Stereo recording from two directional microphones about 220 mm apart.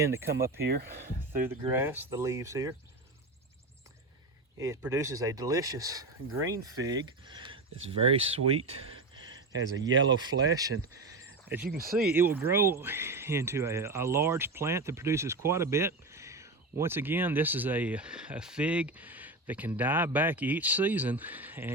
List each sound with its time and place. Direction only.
0.0 s speech: 10° right (ahead or behind)
4.5 s speech: 15° right (ahead or behind)
8.5 s speech: 70° right (ahead or behind)
9.1 s a sound: 20° right (ahead or behind)
9.5 s speech: 60° right (ahead or behind)
10.2 s speech: 20° right (ahead or behind)
11.4 s speech: 5° right (ahead or behind)